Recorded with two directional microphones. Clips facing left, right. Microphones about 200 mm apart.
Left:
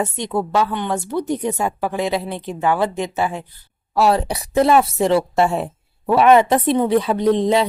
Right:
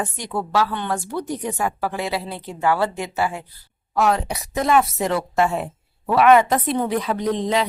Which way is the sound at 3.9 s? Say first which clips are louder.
Left 3 dB; 35° left (ahead or behind).